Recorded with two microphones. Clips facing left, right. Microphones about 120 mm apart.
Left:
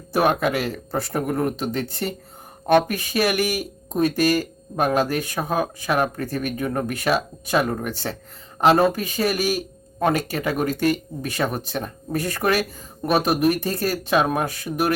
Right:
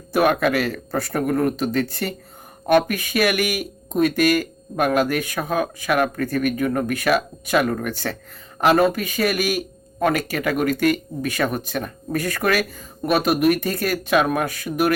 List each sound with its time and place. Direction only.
0.1 s speech: 25° left (ahead or behind)